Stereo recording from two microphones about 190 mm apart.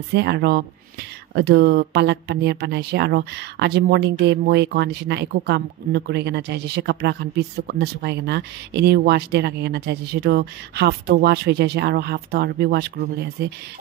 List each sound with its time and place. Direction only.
0.1 s speech: 60° right (ahead or behind)